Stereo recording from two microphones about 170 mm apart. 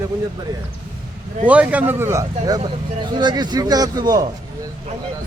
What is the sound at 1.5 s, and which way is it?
A man's voice, 10° right (ahead or behind).